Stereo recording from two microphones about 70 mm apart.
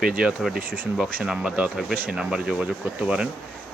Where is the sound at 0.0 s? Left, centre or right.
Centre.